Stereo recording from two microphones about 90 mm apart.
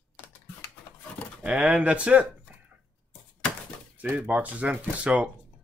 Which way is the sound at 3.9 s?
20° right (ahead or behind).